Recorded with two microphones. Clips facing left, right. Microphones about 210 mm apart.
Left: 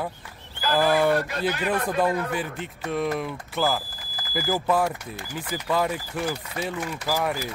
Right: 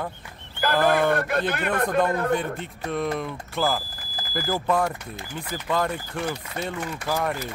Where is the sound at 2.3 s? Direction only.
5° left (ahead or behind).